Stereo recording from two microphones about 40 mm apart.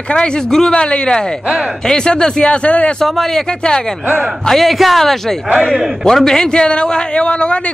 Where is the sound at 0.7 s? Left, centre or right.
Left.